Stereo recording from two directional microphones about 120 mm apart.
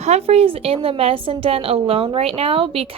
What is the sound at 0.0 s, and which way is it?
A woman's voice, 60° right (ahead or behind).